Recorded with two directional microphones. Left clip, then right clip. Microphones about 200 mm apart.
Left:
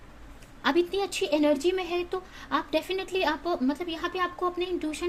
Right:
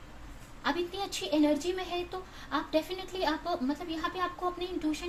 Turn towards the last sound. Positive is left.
turn(degrees=55)  # may be behind; listen again after turning